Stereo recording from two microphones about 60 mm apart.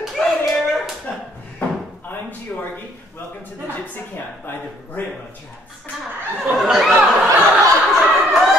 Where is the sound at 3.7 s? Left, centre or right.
Left.